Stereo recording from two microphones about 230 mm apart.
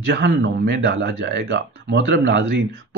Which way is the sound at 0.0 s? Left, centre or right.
Right.